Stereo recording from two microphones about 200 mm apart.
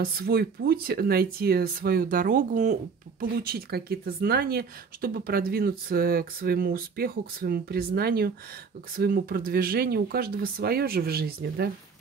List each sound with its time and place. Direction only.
0.0 s speech: 50° right (ahead or behind)